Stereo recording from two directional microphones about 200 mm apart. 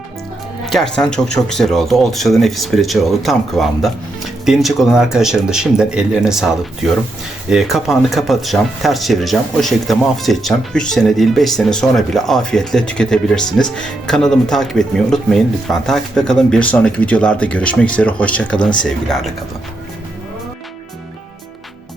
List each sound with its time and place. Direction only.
0.6 s speech: centre (ahead or behind)